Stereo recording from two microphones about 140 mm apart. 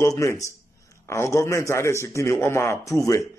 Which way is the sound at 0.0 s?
20° left (ahead or behind).